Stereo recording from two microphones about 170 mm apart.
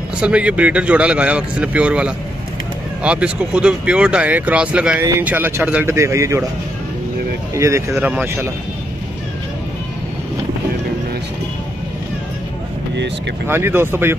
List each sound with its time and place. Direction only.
0.2 s speech: 5° right (ahead or behind)
7.5 s speech: 15° right (ahead or behind)
13.5 s speech: 15° right (ahead or behind)